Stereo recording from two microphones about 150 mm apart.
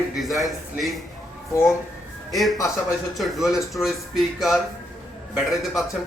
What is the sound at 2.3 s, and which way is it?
Speech, centre (ahead or behind).